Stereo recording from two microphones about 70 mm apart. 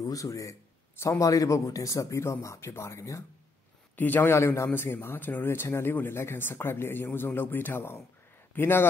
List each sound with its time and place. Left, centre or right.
0.0 s speech: left
3.9 s a man's voice: left